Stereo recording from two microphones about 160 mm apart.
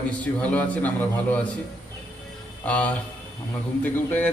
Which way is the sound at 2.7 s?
10° left (ahead or behind).